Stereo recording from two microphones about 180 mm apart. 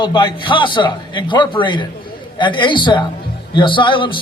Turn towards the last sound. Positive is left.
turn(degrees=25)  # may be behind; listen again after turning